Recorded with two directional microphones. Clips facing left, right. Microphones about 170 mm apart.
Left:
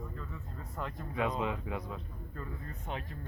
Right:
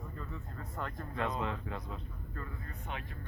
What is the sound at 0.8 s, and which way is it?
Speech, 5° left (ahead or behind).